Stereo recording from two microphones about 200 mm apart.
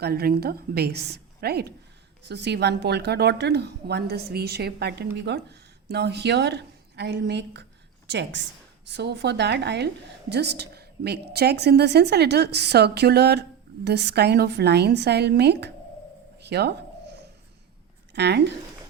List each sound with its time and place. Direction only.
0.0 s a woman's voice: 50° right (ahead or behind)
18.1 s speech: 55° right (ahead or behind)